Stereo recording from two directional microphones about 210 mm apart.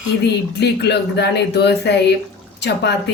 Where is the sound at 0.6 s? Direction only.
55° left (ahead or behind).